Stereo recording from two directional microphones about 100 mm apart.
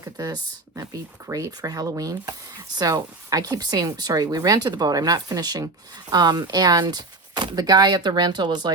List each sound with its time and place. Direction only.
0.0 s speech: 35° right (ahead or behind)